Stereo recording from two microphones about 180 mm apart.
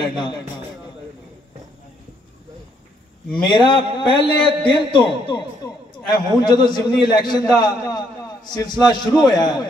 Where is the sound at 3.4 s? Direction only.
25° left (ahead or behind).